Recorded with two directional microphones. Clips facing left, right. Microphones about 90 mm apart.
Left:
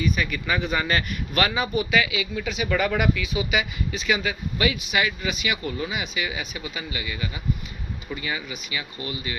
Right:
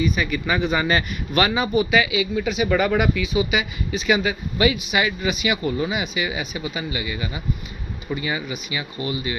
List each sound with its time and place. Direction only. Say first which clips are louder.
0.2 s speech: right 3 dB; 10° right (ahead or behind)
4.0 s speech: right 5 dB; 20° right (ahead or behind)